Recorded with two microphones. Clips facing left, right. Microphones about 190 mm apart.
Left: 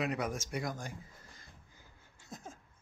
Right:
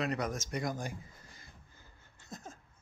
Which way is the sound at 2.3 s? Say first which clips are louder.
Right 1 dB; 10° left (ahead or behind).